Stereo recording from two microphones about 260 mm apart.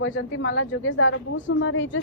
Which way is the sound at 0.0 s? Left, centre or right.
Left.